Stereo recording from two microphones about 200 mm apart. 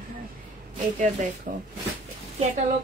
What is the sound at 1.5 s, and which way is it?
Speech, 45° right (ahead or behind).